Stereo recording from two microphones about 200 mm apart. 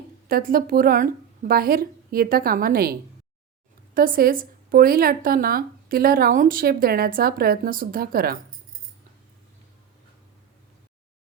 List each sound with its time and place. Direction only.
0.3 s a woman's voice: 45° right (ahead or behind)
3.9 s a woman's voice: 45° right (ahead or behind)